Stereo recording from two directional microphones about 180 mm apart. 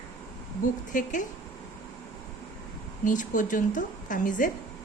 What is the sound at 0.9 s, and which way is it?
Speech, 45° left (ahead or behind).